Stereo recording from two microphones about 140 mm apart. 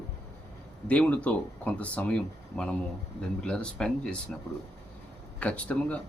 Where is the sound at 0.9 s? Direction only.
10° left (ahead or behind).